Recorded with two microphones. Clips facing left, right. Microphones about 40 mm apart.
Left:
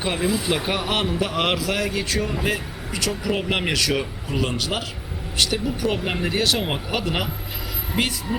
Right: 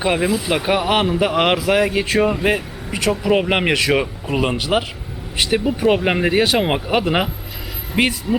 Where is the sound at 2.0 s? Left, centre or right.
Right.